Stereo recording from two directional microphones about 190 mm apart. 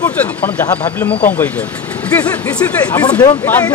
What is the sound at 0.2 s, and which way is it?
Speech, 10° left (ahead or behind).